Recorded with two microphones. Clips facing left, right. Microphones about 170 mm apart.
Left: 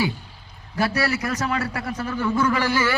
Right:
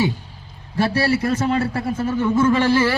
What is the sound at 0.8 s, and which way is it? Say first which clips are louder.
A man's voice: right 4 dB; 30° right (ahead or behind).